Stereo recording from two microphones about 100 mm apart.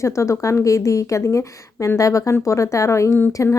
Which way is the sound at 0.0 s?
30° left (ahead or behind).